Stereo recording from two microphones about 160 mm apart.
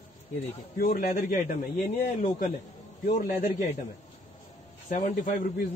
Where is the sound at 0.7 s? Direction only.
65° left (ahead or behind).